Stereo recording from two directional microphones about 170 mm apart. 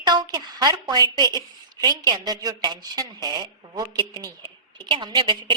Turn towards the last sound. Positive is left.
turn(degrees=-30)  # may be behind; listen again after turning